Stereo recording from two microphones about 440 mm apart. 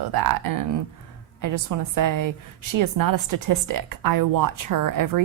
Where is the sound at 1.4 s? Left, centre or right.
Right.